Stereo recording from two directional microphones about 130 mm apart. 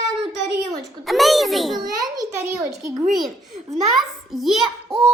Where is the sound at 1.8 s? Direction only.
30° right (ahead or behind).